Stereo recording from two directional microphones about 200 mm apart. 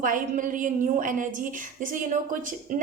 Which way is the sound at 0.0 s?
40° right (ahead or behind).